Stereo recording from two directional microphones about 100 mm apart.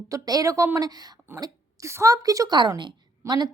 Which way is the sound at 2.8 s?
50° right (ahead or behind).